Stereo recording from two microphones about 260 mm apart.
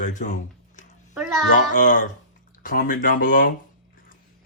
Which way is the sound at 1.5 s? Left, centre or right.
Left.